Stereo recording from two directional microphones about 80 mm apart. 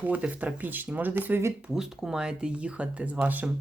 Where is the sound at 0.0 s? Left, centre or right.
Centre.